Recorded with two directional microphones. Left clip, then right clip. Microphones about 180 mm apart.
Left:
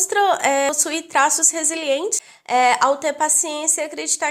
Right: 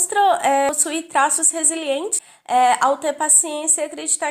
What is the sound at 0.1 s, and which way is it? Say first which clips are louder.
A woman's voice: right 2 dB; 40° left (ahead or behind).